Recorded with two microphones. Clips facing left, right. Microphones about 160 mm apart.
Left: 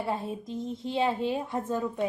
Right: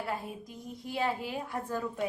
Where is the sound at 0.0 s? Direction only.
25° left (ahead or behind).